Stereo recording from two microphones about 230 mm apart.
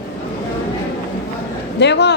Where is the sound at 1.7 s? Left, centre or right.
Left.